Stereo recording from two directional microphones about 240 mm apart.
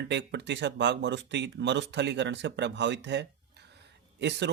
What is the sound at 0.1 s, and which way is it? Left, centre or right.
Speech, right.